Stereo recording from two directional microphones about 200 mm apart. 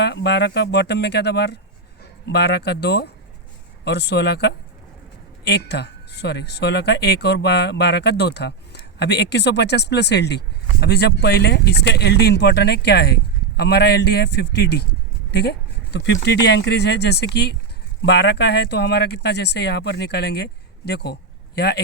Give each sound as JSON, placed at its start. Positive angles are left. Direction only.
{"t": 0.0, "sound": "speech", "side_deg": 55}